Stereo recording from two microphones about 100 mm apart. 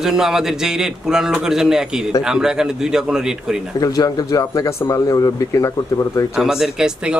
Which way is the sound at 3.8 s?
35° left (ahead or behind).